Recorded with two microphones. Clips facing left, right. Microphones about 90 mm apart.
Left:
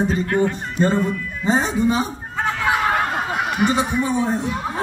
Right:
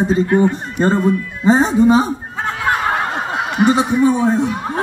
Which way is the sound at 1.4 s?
35° right (ahead or behind).